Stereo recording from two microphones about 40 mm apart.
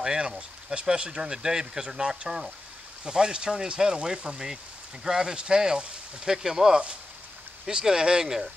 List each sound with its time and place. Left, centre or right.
0.0 s speech: centre